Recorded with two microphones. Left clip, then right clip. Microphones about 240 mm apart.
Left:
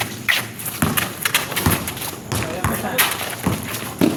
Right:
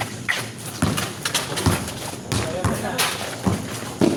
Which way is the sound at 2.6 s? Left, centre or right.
Left.